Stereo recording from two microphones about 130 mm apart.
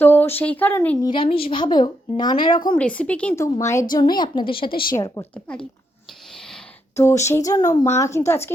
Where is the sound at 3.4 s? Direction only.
25° left (ahead or behind).